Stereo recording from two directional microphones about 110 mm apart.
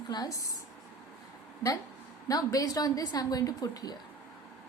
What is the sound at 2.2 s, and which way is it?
A woman's voice, 30° left (ahead or behind).